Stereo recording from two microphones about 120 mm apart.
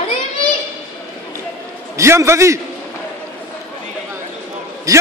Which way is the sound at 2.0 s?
25° right (ahead or behind).